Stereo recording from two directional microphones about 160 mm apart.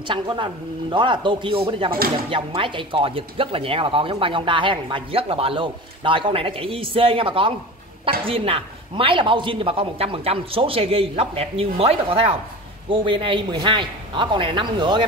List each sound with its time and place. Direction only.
0.1 s speech: 30° right (ahead or behind)